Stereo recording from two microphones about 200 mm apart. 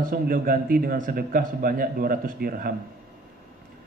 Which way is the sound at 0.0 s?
45° right (ahead or behind).